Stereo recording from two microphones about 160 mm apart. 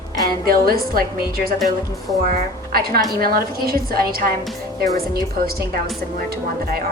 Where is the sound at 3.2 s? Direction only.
65° right (ahead or behind).